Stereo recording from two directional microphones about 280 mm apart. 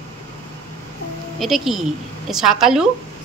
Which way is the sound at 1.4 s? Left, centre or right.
Centre.